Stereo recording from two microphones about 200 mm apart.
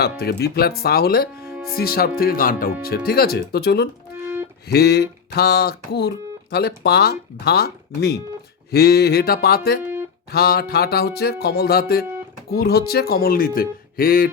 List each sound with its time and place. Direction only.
0.0 s speech: 55° left (ahead or behind)
1.4 s music: 15° right (ahead or behind)
1.7 s speech: 50° left (ahead or behind)